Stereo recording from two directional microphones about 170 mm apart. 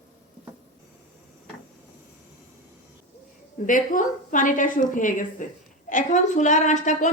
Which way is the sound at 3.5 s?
50° left (ahead or behind).